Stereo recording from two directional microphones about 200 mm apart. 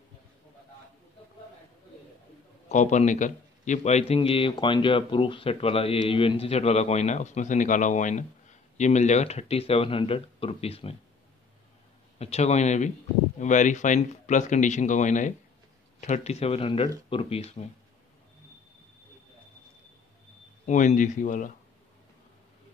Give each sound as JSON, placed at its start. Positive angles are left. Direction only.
{"t": 2.7, "sound": "a man's voice", "side_deg": 35}
{"t": 12.2, "sound": "a man's voice", "side_deg": 30}
{"t": 20.6, "sound": "a man's voice", "side_deg": 40}